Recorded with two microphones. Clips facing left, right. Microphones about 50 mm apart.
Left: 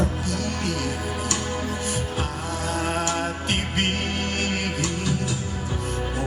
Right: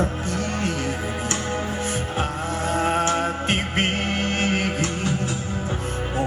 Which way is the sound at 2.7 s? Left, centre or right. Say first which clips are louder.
Right 4 dB; right.